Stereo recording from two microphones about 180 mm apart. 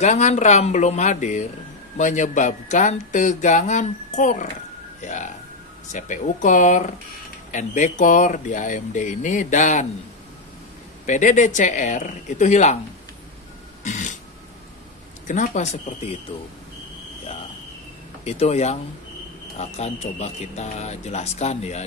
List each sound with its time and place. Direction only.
0.0 s speech: 40° left (ahead or behind)
11.1 s speech: 45° left (ahead or behind)
13.8 s burping: 45° left (ahead or behind)
15.2 s speech: 45° left (ahead or behind)
18.2 s speech: 35° left (ahead or behind)